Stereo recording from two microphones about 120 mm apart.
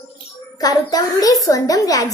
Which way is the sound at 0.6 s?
30° left (ahead or behind).